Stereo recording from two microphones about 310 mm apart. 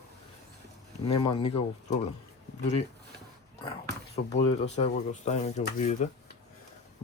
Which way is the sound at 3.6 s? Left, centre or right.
Centre.